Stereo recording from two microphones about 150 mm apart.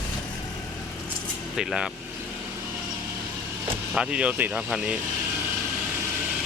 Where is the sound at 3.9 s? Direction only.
5° right (ahead or behind).